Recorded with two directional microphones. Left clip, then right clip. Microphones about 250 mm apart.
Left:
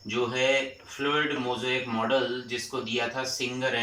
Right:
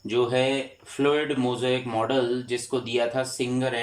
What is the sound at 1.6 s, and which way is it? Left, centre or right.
Speech, right.